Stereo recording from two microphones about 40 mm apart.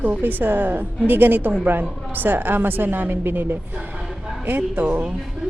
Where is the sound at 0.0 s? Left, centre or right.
Right.